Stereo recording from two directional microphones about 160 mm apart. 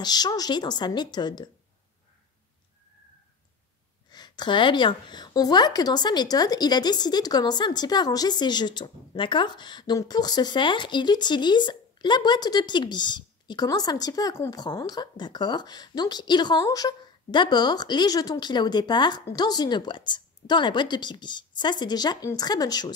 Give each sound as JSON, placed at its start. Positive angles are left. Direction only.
{"t": 0.0, "sound": "a woman's voice", "side_deg": 25}
{"t": 4.1, "sound": "a woman's voice", "side_deg": 25}